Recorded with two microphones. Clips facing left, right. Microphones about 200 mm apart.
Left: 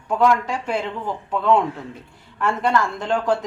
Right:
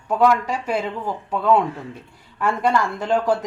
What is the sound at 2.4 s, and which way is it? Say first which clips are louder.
Speech: even; 10° right (ahead or behind).